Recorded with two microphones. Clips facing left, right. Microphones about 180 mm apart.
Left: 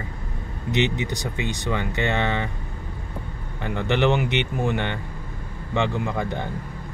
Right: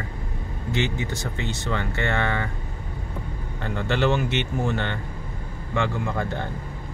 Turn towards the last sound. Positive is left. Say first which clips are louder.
# left 1 dB
turn(degrees=15)  # may be behind; listen again after turning